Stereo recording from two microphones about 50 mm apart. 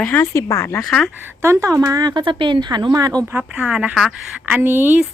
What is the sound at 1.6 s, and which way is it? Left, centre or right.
Speech, right.